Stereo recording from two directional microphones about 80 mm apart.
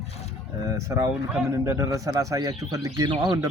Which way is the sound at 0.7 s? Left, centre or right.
Right.